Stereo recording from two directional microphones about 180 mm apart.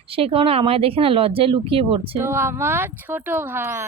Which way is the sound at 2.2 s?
15° right (ahead or behind).